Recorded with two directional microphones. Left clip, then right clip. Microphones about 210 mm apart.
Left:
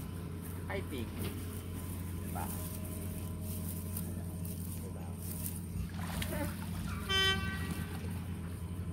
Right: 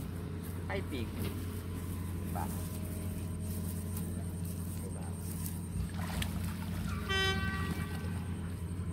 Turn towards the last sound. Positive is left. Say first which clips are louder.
# left 2 dB
turn(degrees=35)  # may be behind; listen again after turning